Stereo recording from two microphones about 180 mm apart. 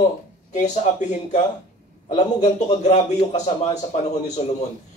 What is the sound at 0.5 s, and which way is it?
Speech, 40° left (ahead or behind).